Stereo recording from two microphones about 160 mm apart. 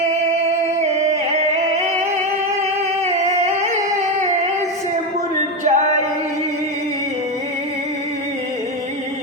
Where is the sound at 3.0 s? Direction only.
45° right (ahead or behind).